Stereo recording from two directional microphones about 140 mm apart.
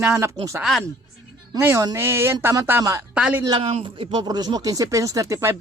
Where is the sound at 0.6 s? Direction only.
Centre (ahead or behind).